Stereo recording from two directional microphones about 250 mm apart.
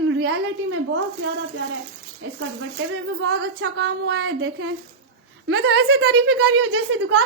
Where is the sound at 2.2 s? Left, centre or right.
Right.